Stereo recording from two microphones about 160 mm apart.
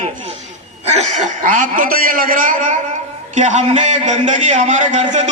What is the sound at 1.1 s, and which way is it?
A man's voice, 50° right (ahead or behind).